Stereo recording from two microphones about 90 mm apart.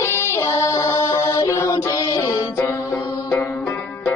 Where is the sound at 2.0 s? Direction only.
55° left (ahead or behind).